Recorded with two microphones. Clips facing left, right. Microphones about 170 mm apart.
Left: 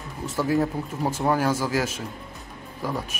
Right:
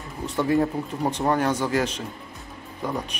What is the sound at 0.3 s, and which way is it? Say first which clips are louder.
Speech: right 1 dB; centre (ahead or behind).